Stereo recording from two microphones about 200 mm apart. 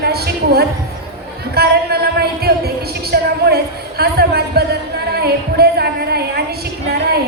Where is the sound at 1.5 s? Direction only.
55° right (ahead or behind).